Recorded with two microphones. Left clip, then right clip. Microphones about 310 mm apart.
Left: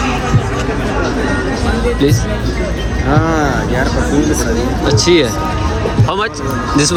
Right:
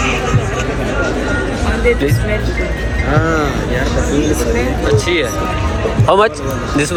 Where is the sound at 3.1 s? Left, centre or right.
Left.